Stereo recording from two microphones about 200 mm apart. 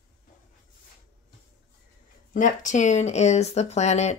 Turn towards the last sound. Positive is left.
turn(degrees=35)  # may be behind; listen again after turning